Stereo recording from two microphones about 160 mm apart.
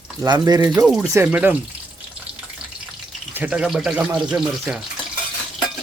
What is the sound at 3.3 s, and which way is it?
Speech, 5° right (ahead or behind).